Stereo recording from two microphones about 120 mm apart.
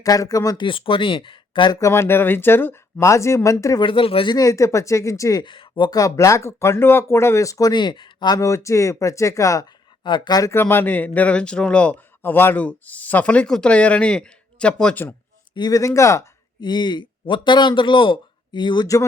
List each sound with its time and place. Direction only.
0.0 s speech: 30° left (ahead or behind)
0.6 s speech: 45° left (ahead or behind)
1.8 s speech: 20° left (ahead or behind)
3.8 s speech: 45° left (ahead or behind)
4.4 s speech: 30° left (ahead or behind)
5.5 s speech: 45° left (ahead or behind)
8.4 s speech: 25° left (ahead or behind)
10.0 s a man's voice: 40° left (ahead or behind)
10.5 s a man's voice: 20° left (ahead or behind)
15.5 s speech: 30° left (ahead or behind)
16.6 s a man's voice: 40° left (ahead or behind)